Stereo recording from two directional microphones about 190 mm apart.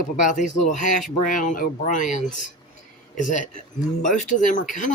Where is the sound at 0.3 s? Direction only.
40° left (ahead or behind).